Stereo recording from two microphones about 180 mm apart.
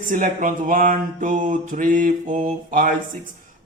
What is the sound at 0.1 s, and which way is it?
A man's voice, 45° right (ahead or behind).